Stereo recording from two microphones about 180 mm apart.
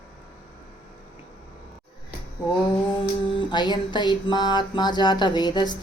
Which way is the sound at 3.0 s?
25° left (ahead or behind).